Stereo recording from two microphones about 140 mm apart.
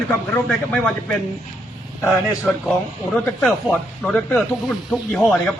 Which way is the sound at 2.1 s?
5° left (ahead or behind).